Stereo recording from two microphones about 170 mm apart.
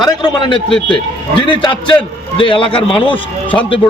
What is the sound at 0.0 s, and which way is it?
A man's voice, 25° left (ahead or behind).